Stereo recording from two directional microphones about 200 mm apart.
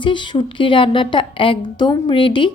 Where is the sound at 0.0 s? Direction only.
25° left (ahead or behind).